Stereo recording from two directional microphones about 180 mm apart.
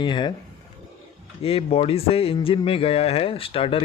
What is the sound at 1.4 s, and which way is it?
A man's voice, 35° left (ahead or behind).